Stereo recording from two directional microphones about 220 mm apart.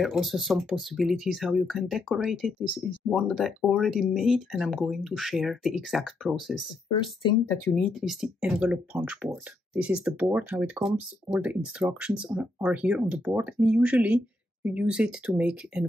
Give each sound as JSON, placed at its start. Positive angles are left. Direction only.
{"t": 0.0, "sound": "speech", "side_deg": 0}
{"t": 7.0, "sound": "speech", "side_deg": 20}
{"t": 7.7, "sound": "speech", "side_deg": 0}